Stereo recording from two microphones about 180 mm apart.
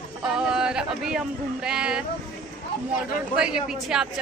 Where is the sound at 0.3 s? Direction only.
5° right (ahead or behind).